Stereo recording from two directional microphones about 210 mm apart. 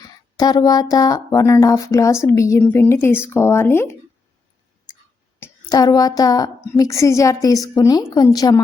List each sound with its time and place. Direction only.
0.3 s a woman's voice: 20° left (ahead or behind)
5.4 s a woman's voice: 15° left (ahead or behind)